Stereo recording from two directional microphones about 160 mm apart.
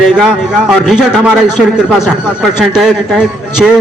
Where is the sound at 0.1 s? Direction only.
5° right (ahead or behind).